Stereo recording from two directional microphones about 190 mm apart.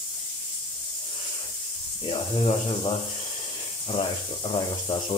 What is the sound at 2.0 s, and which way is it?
Speech, 30° left (ahead or behind).